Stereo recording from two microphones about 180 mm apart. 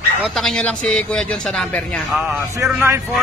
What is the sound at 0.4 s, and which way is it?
A man's voice, 5° left (ahead or behind).